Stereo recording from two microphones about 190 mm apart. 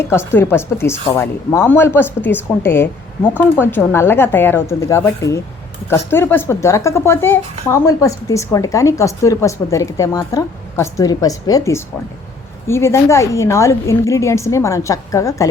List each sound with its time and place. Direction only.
0.0 s a woman's voice: 15° left (ahead or behind)